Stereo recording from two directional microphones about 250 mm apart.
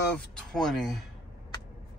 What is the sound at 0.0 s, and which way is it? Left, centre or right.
Speech, centre.